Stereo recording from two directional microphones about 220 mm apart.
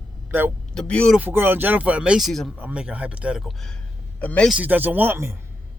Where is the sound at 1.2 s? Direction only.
10° right (ahead or behind); by 4.5 s 5° left (ahead or behind).